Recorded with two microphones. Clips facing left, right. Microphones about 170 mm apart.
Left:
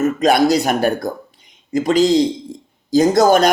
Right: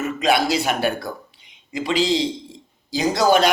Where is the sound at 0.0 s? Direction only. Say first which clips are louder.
Left 6 dB; 45° left (ahead or behind).